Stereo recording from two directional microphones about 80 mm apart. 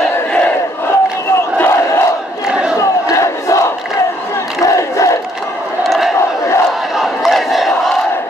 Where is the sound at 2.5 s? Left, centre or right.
Centre.